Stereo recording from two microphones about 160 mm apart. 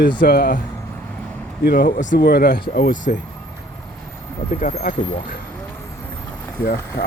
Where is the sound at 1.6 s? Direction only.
70° left (ahead or behind); by 3.2 s 55° left (ahead or behind).